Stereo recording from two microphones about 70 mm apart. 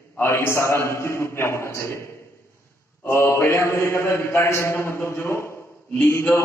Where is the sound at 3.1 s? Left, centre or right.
Left.